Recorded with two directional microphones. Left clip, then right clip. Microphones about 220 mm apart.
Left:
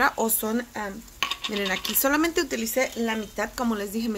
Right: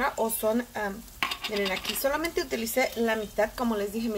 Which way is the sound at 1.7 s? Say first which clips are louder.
Left 6 dB; 45° left (ahead or behind).